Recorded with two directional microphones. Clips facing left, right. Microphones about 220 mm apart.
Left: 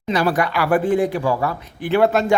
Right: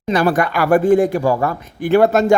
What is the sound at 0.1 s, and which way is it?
Speech, 50° right (ahead or behind).